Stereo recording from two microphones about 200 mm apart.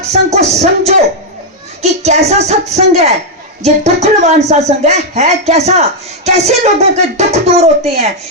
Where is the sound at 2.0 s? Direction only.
35° right (ahead or behind).